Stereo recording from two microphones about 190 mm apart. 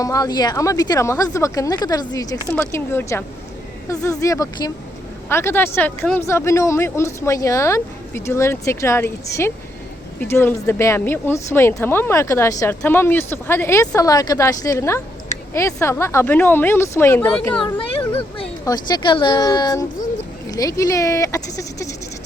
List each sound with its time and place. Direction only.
0.0 s speech: 20° left (ahead or behind)
17.7 s a sound: 30° left (ahead or behind)
18.6 s speech: 20° left (ahead or behind)